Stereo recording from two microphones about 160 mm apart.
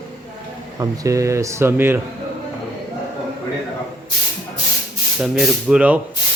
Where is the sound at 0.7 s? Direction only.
20° right (ahead or behind).